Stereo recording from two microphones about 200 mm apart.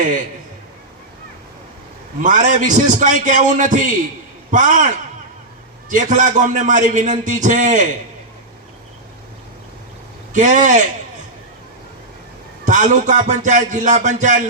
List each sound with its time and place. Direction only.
2.2 s a man's voice: 40° right (ahead or behind)
5.9 s a man's voice: 40° right (ahead or behind)
10.3 s a man's voice: 40° right (ahead or behind)
12.6 s a man's voice: 40° right (ahead or behind)